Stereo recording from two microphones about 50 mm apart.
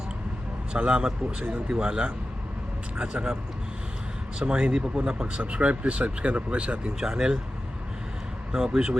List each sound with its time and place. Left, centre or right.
0.7 s speech: right
4.4 s speech: centre
5.4 s speech: right
7.0 s speech: centre
8.5 s speech: centre